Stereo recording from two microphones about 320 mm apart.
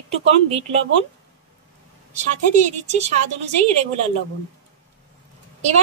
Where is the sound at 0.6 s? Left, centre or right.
Centre.